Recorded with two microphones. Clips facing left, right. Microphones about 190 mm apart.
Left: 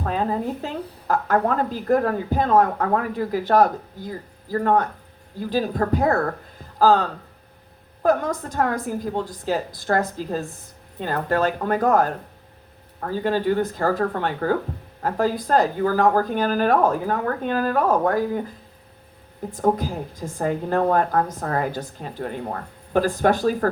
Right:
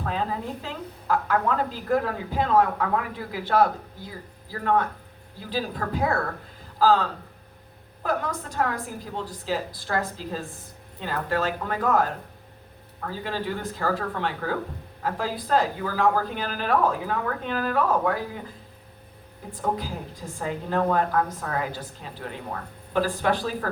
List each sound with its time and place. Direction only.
0.0 s a woman's voice: 45° left (ahead or behind)
19.5 s a woman's voice: 45° left (ahead or behind)